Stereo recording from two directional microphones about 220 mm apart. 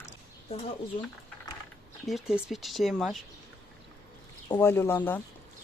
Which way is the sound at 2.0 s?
Centre (ahead or behind).